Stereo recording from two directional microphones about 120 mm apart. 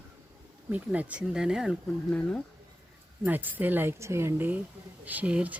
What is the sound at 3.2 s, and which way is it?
Speech, 15° right (ahead or behind).